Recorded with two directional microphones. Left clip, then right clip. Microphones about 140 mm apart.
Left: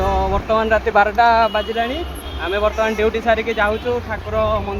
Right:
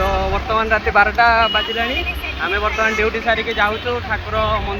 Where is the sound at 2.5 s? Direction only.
90° left.